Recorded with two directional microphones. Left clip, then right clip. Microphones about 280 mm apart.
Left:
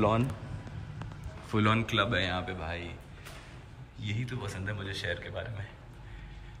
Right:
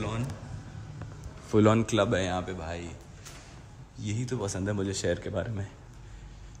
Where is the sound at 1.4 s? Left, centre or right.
Centre.